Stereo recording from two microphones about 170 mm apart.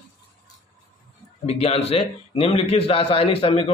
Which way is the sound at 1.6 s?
35° left (ahead or behind).